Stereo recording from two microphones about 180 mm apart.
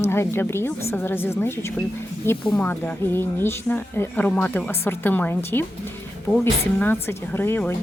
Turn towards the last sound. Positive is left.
turn(degrees=10)  # may be behind; listen again after turning